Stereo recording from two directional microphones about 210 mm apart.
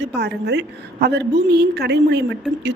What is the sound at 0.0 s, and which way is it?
Speech, 50° right (ahead or behind).